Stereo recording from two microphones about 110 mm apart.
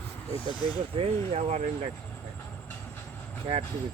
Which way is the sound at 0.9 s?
70° right (ahead or behind).